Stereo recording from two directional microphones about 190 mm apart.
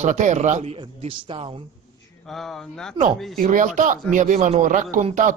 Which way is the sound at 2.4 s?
Centre (ahead or behind).